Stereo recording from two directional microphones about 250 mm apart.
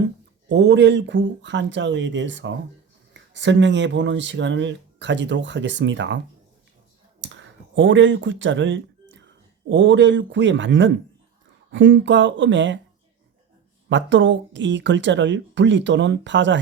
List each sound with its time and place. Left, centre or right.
0.4 s speech: right
7.2 s a sound: right
9.6 s speech: right
13.9 s speech: right